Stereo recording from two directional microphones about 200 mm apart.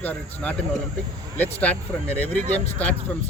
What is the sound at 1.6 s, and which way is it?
Speech, 5° left (ahead or behind).